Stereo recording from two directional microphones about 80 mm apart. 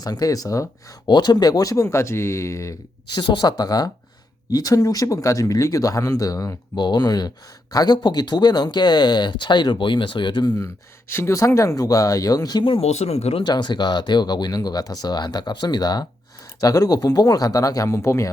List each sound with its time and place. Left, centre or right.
0.0 s speech: left
1.0 s speech: left
3.1 s speech: left
6.7 s speech: left
11.1 s speech: left
16.6 s speech: left